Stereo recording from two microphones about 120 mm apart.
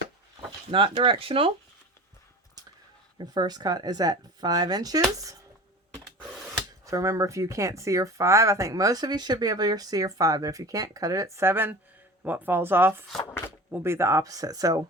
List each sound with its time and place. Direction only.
0.7 s speech: 45° right (ahead or behind)
3.2 s speech: 35° right (ahead or behind)
6.8 s speech: 25° right (ahead or behind)